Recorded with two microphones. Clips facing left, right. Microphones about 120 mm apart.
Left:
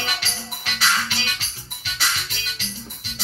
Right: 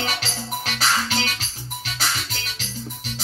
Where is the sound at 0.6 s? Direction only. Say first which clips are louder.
Even; 40° right (ahead or behind).